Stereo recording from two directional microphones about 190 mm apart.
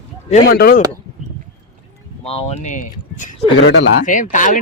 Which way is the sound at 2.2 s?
30° left (ahead or behind).